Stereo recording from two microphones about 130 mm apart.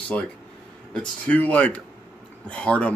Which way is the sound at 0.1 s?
10° left (ahead or behind).